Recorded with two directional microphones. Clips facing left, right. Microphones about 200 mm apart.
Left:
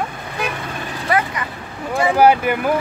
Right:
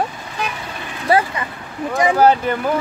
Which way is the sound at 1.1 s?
30° right (ahead or behind).